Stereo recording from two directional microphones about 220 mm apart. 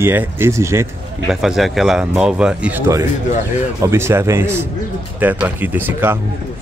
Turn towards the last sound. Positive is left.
turn(degrees=-10)  # may be behind; listen again after turning